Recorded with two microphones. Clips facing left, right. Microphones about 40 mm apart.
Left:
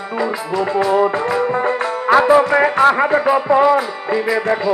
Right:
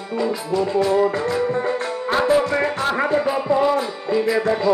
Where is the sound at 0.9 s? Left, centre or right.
Left.